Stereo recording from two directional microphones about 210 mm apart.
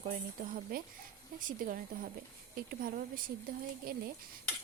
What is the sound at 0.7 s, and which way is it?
A woman's voice, 45° right (ahead or behind).